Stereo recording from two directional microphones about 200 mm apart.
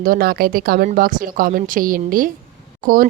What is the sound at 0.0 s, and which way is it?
A woman's voice, 45° right (ahead or behind).